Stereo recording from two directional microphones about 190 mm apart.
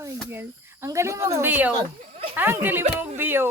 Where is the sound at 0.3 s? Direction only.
10° right (ahead or behind).